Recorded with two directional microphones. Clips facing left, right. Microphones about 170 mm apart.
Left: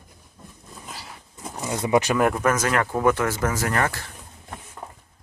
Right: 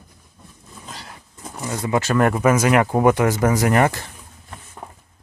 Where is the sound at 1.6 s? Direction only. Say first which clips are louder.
Left 1 dB; 20° left (ahead or behind).